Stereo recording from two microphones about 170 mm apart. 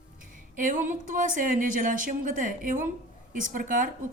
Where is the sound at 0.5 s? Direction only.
50° right (ahead or behind).